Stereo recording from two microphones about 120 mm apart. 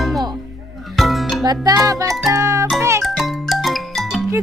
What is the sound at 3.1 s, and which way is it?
Music, centre (ahead or behind).